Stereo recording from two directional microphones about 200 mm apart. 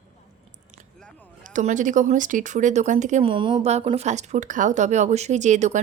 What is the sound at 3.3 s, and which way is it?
A woman's voice, 25° right (ahead or behind).